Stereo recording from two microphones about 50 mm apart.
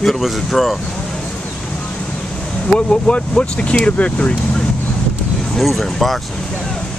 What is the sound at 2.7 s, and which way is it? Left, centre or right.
Speech, left.